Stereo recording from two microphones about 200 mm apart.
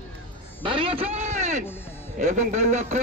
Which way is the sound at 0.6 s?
25° right (ahead or behind).